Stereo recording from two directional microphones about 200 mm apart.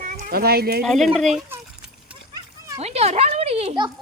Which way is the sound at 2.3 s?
20° right (ahead or behind).